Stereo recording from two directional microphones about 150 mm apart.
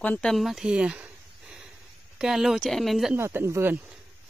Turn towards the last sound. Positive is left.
turn(degrees=-15)  # may be behind; listen again after turning